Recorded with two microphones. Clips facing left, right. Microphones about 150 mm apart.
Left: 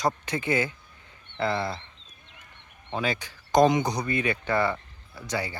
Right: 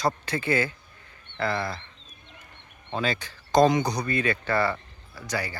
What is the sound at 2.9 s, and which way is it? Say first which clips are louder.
Speech: right 1 dB; 15° left (ahead or behind).